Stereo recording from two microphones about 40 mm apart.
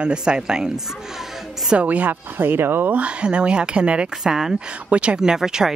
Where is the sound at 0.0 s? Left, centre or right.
Right.